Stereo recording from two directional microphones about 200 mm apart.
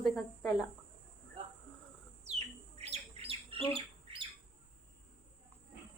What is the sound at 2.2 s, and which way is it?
Bird, 30° right (ahead or behind).